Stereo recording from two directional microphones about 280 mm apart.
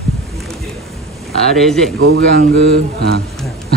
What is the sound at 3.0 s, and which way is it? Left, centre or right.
Speech, right.